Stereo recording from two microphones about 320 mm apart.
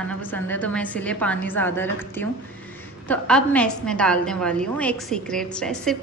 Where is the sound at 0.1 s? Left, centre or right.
Centre.